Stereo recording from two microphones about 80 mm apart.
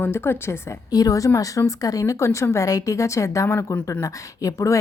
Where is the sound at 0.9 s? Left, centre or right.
Left.